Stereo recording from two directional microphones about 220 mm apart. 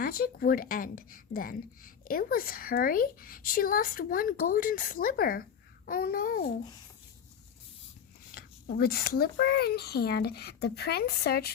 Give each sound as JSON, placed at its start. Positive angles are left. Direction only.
{"t": 0.0, "sound": "a woman's voice", "side_deg": 40}
{"t": 8.4, "sound": "a child's voice", "side_deg": 40}